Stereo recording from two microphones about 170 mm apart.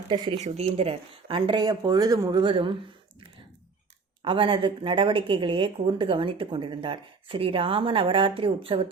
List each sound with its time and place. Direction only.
0.1 s speech: 25° right (ahead or behind)
0.3 s speech: 40° right (ahead or behind)
4.2 s speech: 30° right (ahead or behind)